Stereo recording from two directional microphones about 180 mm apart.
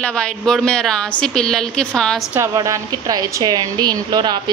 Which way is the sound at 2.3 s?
15° right (ahead or behind).